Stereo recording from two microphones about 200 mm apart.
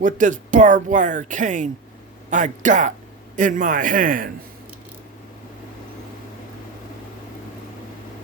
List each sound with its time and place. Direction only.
0.0 s speech: 40° right (ahead or behind)